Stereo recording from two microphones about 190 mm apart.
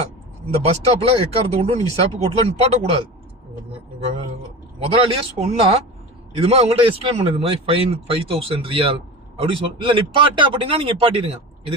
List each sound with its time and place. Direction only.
0.6 s speech: 35° right (ahead or behind)
4.9 s speech: 30° right (ahead or behind)